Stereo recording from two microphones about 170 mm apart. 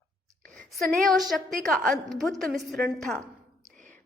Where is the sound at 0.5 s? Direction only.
Centre (ahead or behind).